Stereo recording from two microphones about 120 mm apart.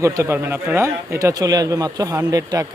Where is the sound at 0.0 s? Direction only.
20° right (ahead or behind).